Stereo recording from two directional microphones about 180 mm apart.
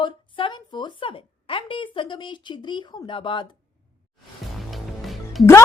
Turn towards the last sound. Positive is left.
turn(degrees=0)  # may be behind; listen again after turning